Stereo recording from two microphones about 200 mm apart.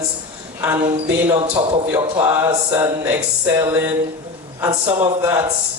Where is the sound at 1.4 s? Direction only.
25° right (ahead or behind).